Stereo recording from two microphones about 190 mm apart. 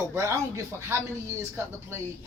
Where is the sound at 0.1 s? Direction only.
15° right (ahead or behind).